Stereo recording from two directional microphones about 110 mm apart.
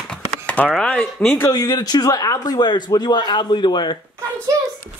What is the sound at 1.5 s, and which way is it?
A man's voice, 40° left (ahead or behind).